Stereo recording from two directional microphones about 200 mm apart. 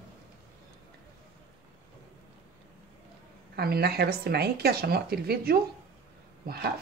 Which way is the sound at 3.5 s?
50° right (ahead or behind).